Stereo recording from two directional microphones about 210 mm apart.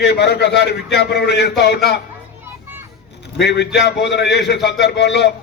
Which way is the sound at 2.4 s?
10° right (ahead or behind).